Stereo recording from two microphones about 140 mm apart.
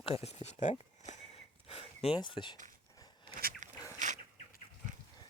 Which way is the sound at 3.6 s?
60° right (ahead or behind).